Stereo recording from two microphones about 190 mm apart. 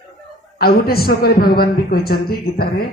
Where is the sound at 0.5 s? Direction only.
55° left (ahead or behind).